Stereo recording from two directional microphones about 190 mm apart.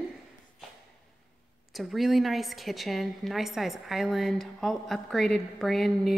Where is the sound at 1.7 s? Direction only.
Centre (ahead or behind).